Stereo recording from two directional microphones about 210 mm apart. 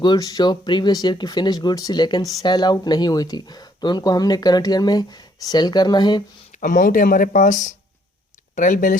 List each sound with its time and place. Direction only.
0.0 s speech: 20° left (ahead or behind)
6.6 s speech: 40° left (ahead or behind)